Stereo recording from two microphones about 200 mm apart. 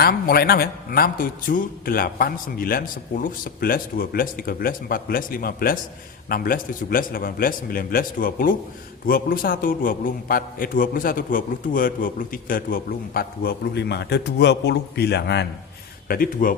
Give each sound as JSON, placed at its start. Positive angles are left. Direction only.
{"t": 0.0, "sound": "a man's voice", "side_deg": 50}
{"t": 16.0, "sound": "a man's voice", "side_deg": 45}